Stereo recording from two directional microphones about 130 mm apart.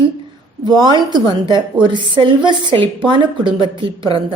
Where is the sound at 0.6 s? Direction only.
35° right (ahead or behind).